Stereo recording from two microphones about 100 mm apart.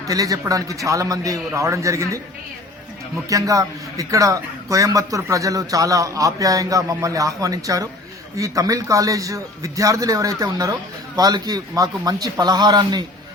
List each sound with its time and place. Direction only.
0.0 s a man's voice: 35° right (ahead or behind)
3.2 s a man's voice: 35° right (ahead or behind)